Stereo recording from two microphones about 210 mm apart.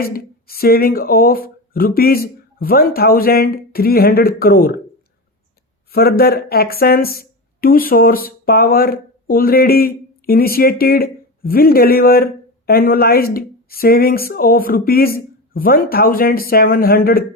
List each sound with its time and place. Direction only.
0.0 s speech: 45° left (ahead or behind)
5.9 s speech: 45° left (ahead or behind)